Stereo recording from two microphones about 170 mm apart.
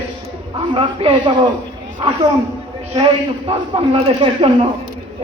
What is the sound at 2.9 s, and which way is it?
A man's voice, 30° right (ahead or behind).